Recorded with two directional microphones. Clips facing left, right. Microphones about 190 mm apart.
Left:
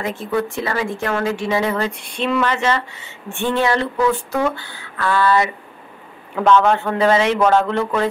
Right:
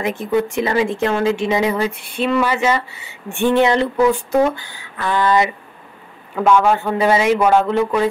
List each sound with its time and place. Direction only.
0.0 s speech: 15° right (ahead or behind)